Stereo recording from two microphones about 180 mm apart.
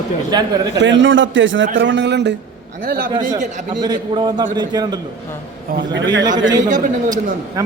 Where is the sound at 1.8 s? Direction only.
75° right (ahead or behind).